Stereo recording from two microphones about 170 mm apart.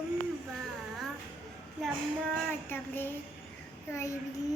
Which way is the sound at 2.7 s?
10° left (ahead or behind).